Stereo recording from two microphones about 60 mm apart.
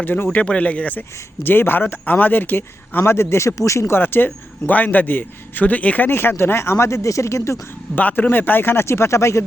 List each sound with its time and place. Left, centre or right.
0.0 s a man's voice: left
0.3 s speech: left
1.5 s a man's voice: left
3.0 s speech: left
3.9 s a man's voice: left
6.1 s speech: left
7.9 s a man's voice: left